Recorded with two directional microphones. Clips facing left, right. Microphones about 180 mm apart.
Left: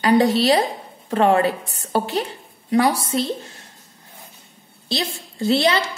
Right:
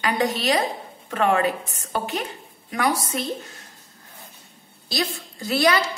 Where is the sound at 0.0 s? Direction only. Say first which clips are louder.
Left 7 dB; 35° left (ahead or behind).